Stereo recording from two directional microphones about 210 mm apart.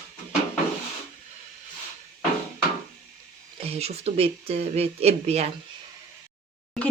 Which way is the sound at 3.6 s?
30° right (ahead or behind).